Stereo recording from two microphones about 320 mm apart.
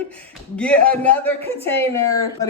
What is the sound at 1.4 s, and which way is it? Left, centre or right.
Speech, centre.